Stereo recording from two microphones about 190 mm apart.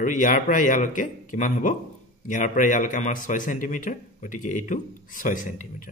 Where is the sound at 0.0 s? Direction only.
45° left (ahead or behind).